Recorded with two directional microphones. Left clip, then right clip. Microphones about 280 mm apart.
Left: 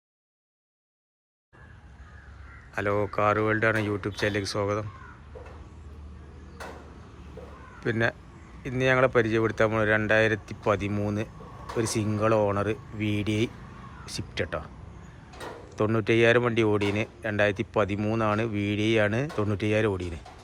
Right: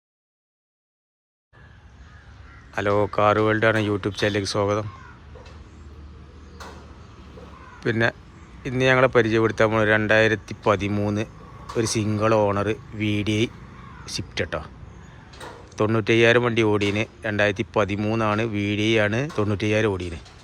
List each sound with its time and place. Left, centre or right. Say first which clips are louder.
2.7 s speech: right 5 dB; centre
6.6 s vehicle: even; left
7.8 s speech: right 4 dB; centre
15.3 s tick-tock: even; left
15.7 s speech: right 4 dB; centre